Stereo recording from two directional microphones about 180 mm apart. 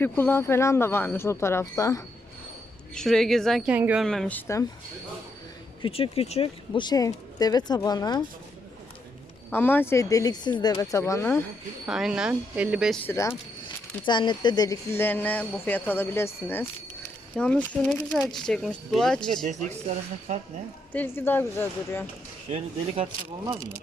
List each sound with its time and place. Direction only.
0.0 s speech: 10° left (ahead or behind)
2.9 s speech: 5° left (ahead or behind)
4.0 s speech: centre (ahead or behind)
5.8 s speech: 30° left (ahead or behind)
9.5 s speech: 10° left (ahead or behind)
11.9 s speech: 5° right (ahead or behind)
13.1 s speech: 15° left (ahead or behind)
20.3 s speech: 40° right (ahead or behind)
20.9 s speech: 10° left (ahead or behind)
22.5 s speech: 35° right (ahead or behind)